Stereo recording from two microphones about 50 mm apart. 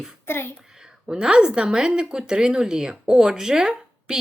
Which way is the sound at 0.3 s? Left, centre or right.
Left.